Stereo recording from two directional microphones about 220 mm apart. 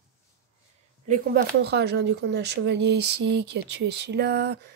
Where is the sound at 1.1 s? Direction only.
45° right (ahead or behind).